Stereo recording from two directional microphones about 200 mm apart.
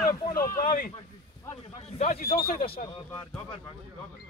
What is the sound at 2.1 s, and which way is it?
Speech, 50° left (ahead or behind).